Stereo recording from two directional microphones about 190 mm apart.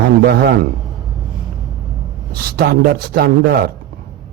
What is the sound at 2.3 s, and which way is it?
Speech, 50° right (ahead or behind).